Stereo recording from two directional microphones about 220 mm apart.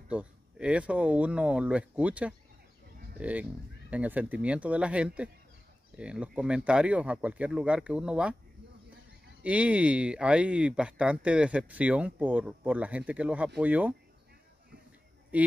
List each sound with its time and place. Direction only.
0.1 s speech: 5° right (ahead or behind)
9.4 s speech: 5° right (ahead or behind)
15.3 s speech: 5° right (ahead or behind)